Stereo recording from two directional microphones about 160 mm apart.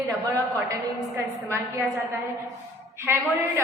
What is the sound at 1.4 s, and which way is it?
A woman's voice, 15° right (ahead or behind).